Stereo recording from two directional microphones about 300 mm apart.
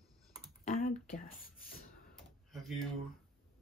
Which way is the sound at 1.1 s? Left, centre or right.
Left.